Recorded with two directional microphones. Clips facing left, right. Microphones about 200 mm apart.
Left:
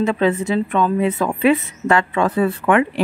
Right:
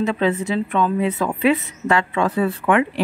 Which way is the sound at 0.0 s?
50° left (ahead or behind).